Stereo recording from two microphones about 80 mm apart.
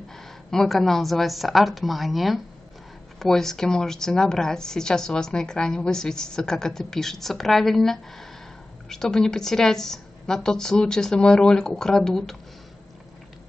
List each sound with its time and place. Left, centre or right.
0.5 s a woman's voice: centre